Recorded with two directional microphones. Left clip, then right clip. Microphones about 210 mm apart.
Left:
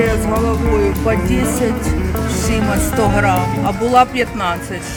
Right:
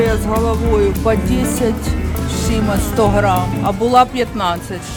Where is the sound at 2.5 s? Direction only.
5° right (ahead or behind).